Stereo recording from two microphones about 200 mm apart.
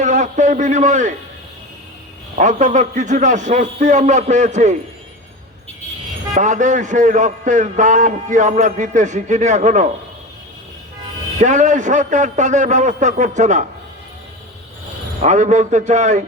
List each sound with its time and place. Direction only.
0.0 s a man's voice: 35° right (ahead or behind)
2.4 s a man's voice: 40° right (ahead or behind)
6.3 s a man's voice: 40° right (ahead or behind)
11.3 s a man's voice: 40° right (ahead or behind)
15.2 s a man's voice: 35° right (ahead or behind)